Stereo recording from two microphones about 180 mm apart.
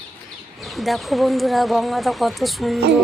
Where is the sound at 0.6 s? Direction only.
Centre (ahead or behind).